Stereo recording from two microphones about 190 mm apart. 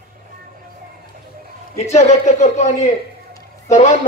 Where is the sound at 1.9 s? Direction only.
35° left (ahead or behind).